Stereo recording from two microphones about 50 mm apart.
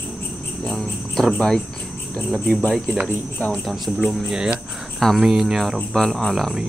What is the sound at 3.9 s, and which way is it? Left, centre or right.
Speech, centre.